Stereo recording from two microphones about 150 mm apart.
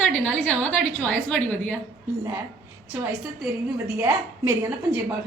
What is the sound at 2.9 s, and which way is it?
A woman's voice, 10° right (ahead or behind).